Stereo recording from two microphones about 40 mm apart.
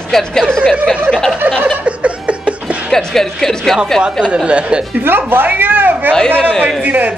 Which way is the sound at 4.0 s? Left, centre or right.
Right.